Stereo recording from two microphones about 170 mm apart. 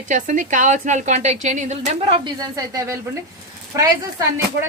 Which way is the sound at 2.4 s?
20° right (ahead or behind).